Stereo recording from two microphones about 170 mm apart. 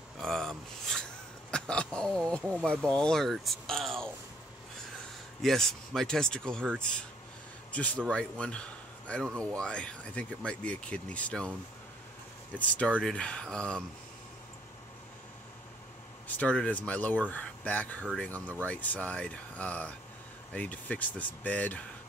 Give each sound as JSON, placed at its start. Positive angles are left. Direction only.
{"t": 0.2, "sound": "a sound", "side_deg": 0}
{"t": 2.6, "sound": "speech", "side_deg": 5}
{"t": 5.4, "sound": "a man's voice", "side_deg": 0}
{"t": 12.5, "sound": "a man's voice", "side_deg": 5}
{"t": 16.3, "sound": "a man's voice", "side_deg": 10}